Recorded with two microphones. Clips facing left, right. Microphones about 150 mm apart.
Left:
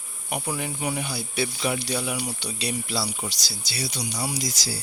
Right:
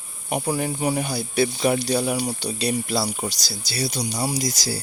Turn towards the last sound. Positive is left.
turn(degrees=-40)  # may be behind; listen again after turning